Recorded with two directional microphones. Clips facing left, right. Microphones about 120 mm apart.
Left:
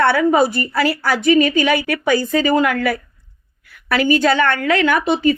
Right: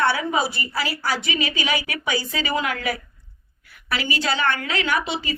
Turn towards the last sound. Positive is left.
turn(degrees=50)  # may be behind; listen again after turning